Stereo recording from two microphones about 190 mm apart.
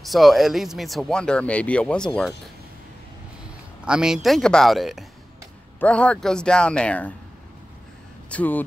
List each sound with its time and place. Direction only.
0.0 s speech: centre (ahead or behind)
3.8 s speech: 5° right (ahead or behind)
8.3 s speech: 10° left (ahead or behind)